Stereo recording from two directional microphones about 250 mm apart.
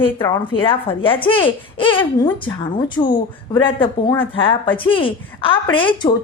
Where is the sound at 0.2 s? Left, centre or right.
Centre.